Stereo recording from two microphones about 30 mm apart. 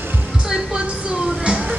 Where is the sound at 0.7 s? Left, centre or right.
Right.